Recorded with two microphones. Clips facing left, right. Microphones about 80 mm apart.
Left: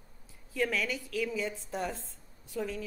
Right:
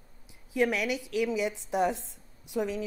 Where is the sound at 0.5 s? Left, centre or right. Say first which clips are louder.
Right 4 dB; centre.